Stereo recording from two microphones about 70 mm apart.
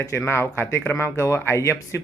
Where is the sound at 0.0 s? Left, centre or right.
Left.